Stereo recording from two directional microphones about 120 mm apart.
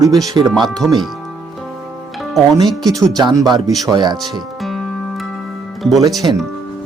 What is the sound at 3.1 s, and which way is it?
Speech, 35° right (ahead or behind).